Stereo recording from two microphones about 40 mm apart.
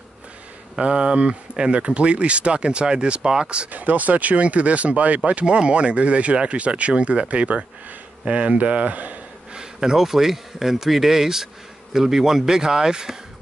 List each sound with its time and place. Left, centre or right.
0.7 s speech: right
3.7 s speech: right
9.5 s speech: centre